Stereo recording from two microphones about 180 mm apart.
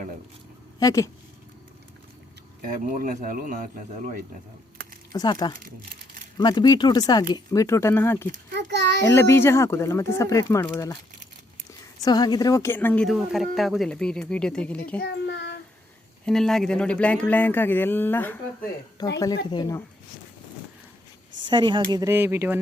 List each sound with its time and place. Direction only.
0.8 s speech: 20° left (ahead or behind)
2.6 s speech: 50° right (ahead or behind)
5.1 s speech: 20° left (ahead or behind)
8.5 s a child's voice: 70° right (ahead or behind)
9.0 s speech: 15° left (ahead or behind)
11.9 s a woman's voice: 20° left (ahead or behind); by 14.8 s 5° left (ahead or behind)
15.0 s child singing: 75° left (ahead or behind)
16.2 s speech: centre (ahead or behind)
19.0 s speech: 20° left (ahead or behind)
21.4 s speech: 25° right (ahead or behind)